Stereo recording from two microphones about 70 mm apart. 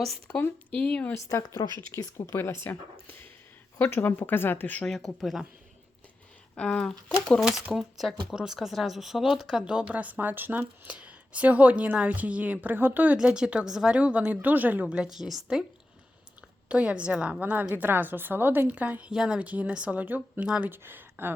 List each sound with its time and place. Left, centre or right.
0.7 s speech: centre
1.1 s speech: left
1.9 s speech: left
4.9 s speech: centre
6.6 s speech: centre
7.3 s speech: centre
9.9 s a woman's voice: right
10.8 s a woman's voice: centre
13.1 s speech: centre
16.6 s a woman's voice: centre
19.1 s speech: centre
19.4 s a woman's voice: right